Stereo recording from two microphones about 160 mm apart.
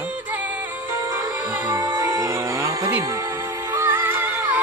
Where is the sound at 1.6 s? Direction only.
20° right (ahead or behind).